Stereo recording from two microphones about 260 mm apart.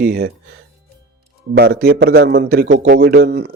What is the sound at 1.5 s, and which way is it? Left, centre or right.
Speech, right.